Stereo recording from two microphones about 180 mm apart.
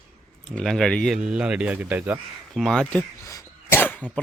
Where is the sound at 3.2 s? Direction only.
15° left (ahead or behind).